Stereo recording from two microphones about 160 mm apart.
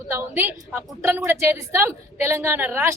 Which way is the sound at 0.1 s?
15° right (ahead or behind).